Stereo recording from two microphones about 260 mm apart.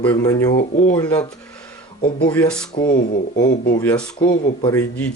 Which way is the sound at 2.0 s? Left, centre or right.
Left.